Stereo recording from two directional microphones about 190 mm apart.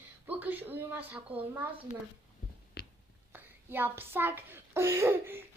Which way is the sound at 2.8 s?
55° left (ahead or behind).